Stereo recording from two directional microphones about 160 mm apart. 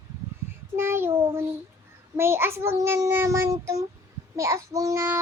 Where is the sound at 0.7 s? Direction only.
15° right (ahead or behind).